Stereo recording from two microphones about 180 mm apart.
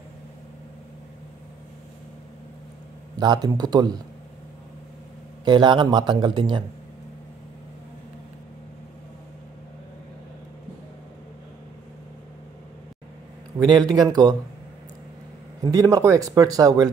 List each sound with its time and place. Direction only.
3.2 s speech: 25° right (ahead or behind)
5.4 s speech: 25° right (ahead or behind)
13.7 s speech: 20° right (ahead or behind)
15.6 s speech: 20° right (ahead or behind)